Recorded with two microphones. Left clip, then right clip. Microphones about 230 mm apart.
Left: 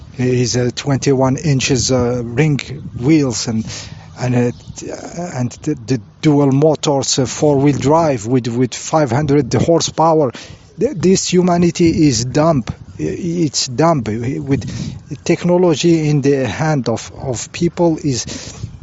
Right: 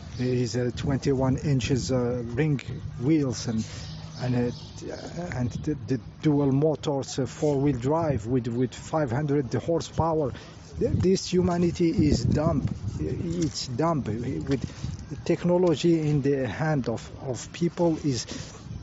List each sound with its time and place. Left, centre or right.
0.2 s speech: left